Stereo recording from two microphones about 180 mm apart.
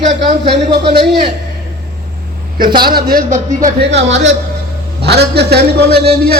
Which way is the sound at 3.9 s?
80° right.